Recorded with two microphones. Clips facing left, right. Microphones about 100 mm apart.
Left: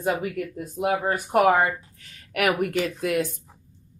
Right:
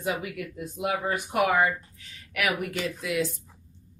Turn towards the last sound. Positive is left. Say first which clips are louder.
# left 4 dB
turn(degrees=55)  # may be behind; listen again after turning